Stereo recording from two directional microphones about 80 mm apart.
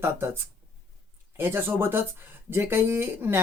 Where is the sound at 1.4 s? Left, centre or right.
Right.